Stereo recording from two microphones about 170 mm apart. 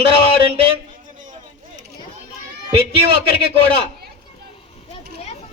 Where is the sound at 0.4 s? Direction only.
35° right (ahead or behind).